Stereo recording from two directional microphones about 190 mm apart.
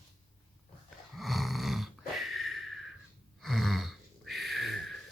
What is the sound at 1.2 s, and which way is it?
Snoring, centre (ahead or behind).